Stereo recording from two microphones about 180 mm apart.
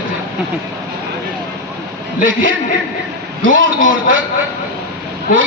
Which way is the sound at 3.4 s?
90° right.